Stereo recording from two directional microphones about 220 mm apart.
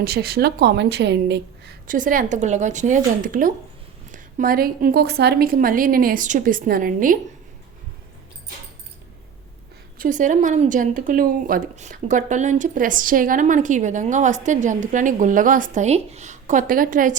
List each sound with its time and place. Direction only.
0.0 s a woman's voice: 45° right (ahead or behind)
10.0 s speech: 35° right (ahead or behind)